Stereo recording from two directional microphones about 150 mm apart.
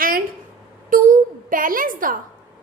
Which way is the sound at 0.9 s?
65° right (ahead or behind).